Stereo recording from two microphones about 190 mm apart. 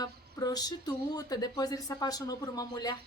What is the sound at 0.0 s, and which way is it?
A woman's voice, 20° left (ahead or behind).